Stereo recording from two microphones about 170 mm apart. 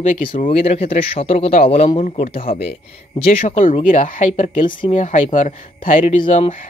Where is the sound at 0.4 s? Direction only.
40° left (ahead or behind).